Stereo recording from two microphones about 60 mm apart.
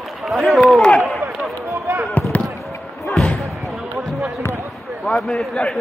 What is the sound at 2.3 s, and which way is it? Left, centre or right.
Basketball bounce, left.